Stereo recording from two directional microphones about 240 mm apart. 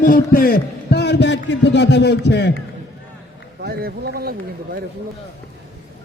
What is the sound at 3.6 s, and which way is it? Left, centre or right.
A man's voice, right.